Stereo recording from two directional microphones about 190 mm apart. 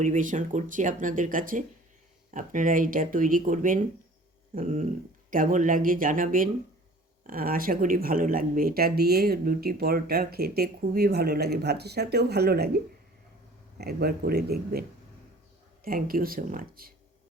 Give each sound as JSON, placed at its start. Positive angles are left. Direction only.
{"t": 0.0, "sound": "speech", "side_deg": -40}